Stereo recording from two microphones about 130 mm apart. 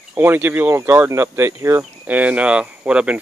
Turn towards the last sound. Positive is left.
turn(degrees=-10)  # may be behind; listen again after turning